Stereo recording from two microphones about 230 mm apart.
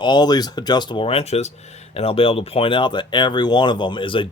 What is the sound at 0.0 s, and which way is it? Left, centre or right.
Speech, centre.